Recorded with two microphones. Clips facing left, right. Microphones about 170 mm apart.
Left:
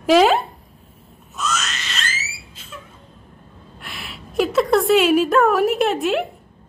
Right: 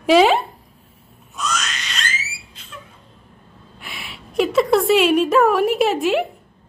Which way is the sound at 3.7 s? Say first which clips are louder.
Even; centre (ahead or behind).